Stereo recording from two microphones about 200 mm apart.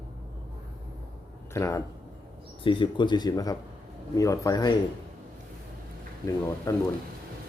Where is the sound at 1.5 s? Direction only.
15° left (ahead or behind).